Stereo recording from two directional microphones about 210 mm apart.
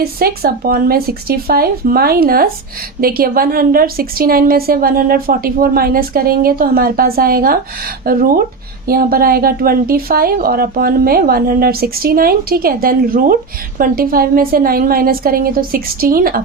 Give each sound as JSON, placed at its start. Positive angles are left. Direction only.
{"t": 0.0, "sound": "a woman's voice", "side_deg": -45}